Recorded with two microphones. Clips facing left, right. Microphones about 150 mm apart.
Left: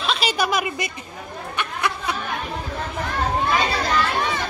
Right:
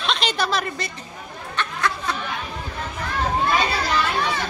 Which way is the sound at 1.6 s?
15° left (ahead or behind).